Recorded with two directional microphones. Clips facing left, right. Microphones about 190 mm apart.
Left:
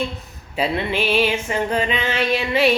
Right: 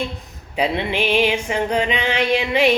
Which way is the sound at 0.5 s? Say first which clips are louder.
Right 1 dB; 15° right (ahead or behind).